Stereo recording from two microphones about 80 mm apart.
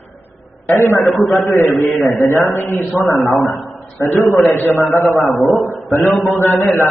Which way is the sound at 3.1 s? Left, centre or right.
Left.